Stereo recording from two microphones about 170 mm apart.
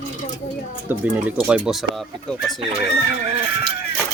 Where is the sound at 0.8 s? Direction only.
10° right (ahead or behind).